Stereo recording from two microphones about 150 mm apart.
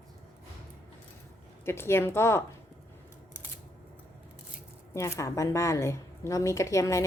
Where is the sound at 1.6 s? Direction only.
15° left (ahead or behind).